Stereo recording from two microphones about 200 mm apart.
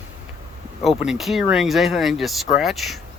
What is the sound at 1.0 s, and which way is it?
Speech, centre (ahead or behind).